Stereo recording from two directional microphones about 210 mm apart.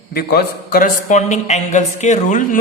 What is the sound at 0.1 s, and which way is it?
A man's voice, 45° left (ahead or behind).